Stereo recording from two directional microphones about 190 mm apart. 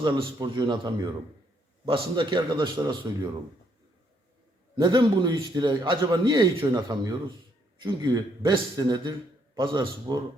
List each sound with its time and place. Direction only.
0.0 s a man's voice: 25° right (ahead or behind)
4.8 s a man's voice: 25° right (ahead or behind)